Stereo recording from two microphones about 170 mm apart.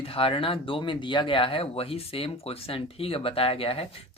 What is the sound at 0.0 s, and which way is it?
Speech, 35° left (ahead or behind).